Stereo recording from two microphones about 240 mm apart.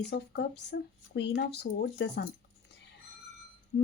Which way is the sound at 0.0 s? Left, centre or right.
Left.